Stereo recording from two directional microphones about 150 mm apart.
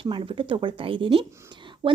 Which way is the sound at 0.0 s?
35° right (ahead or behind).